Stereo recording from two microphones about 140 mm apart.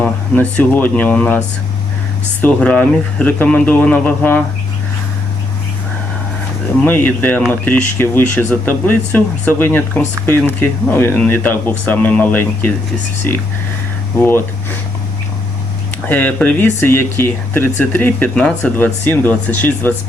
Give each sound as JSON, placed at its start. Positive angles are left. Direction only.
{"t": 0.0, "sound": "speech", "side_deg": 10}
{"t": 2.4, "sound": "speech", "side_deg": 10}
{"t": 6.8, "sound": "speech", "side_deg": 15}
{"t": 16.0, "sound": "speech", "side_deg": 10}